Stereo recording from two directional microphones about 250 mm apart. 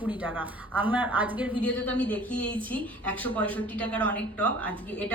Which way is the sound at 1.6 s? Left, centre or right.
Centre.